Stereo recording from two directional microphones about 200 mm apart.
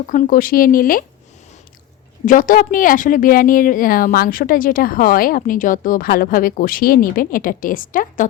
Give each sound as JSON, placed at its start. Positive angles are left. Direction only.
{"t": 0.1, "sound": "a woman's voice", "side_deg": 45}
{"t": 2.2, "sound": "a woman's voice", "side_deg": 40}